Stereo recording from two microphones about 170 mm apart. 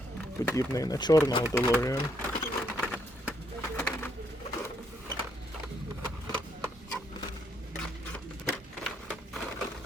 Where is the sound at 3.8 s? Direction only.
10° left (ahead or behind).